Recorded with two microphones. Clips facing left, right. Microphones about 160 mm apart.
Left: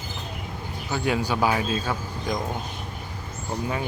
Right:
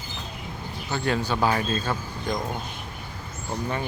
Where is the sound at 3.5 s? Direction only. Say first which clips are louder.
Left 1 dB; 5° left (ahead or behind).